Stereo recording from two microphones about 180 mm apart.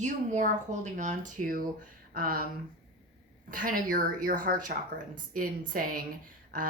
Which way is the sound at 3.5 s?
50° right (ahead or behind).